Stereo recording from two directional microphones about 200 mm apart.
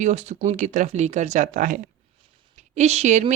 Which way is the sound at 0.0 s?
35° right (ahead or behind).